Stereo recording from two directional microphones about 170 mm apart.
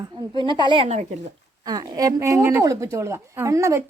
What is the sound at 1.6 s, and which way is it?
A woman's voice, 20° right (ahead or behind).